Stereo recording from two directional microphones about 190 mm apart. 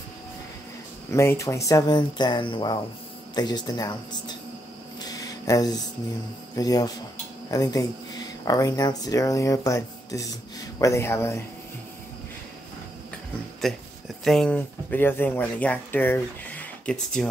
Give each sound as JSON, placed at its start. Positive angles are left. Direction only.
{"t": 1.1, "sound": "speech", "side_deg": 15}
{"t": 5.0, "sound": "a sound", "side_deg": 20}
{"t": 6.5, "sound": "speech", "side_deg": 20}
{"t": 13.6, "sound": "speech", "side_deg": 0}